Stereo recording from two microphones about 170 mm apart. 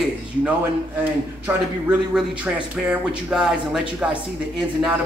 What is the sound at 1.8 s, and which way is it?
Speech, 5° right (ahead or behind).